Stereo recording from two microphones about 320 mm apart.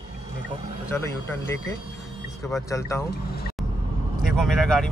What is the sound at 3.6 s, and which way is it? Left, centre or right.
Vehicle, centre.